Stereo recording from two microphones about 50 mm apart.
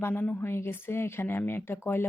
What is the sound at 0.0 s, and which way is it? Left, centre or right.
Speech, left.